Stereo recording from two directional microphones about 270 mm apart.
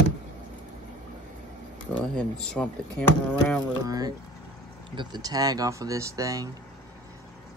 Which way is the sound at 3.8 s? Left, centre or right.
Centre.